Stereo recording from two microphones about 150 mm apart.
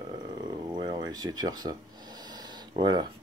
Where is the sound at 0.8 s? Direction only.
25° right (ahead or behind).